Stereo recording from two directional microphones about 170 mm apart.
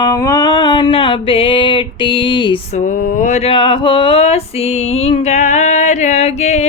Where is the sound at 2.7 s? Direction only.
50° left (ahead or behind).